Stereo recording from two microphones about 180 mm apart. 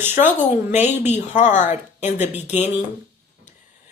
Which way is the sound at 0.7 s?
40° left (ahead or behind).